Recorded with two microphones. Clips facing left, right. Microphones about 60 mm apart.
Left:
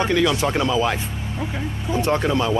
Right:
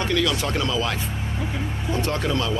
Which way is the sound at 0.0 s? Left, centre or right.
Left.